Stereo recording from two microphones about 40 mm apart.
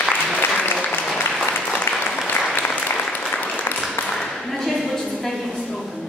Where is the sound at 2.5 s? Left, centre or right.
Left.